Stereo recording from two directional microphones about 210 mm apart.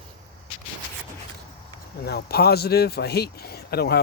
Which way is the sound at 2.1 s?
50° left (ahead or behind).